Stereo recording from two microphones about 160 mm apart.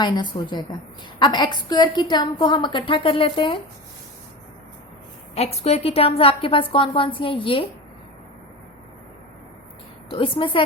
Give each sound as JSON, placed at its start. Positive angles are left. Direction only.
{"t": 0.0, "sound": "a woman's voice", "side_deg": 30}
{"t": 5.3, "sound": "a woman's voice", "side_deg": 40}
{"t": 10.1, "sound": "a woman's voice", "side_deg": 30}